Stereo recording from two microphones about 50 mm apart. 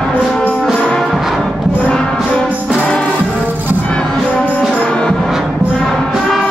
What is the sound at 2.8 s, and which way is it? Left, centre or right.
Music, left.